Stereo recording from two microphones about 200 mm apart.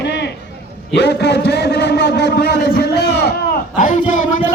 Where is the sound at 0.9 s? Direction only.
55° left (ahead or behind).